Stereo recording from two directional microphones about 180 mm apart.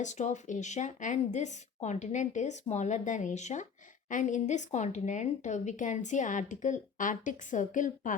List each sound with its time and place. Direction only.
0.0 s a woman's voice: 40° left (ahead or behind)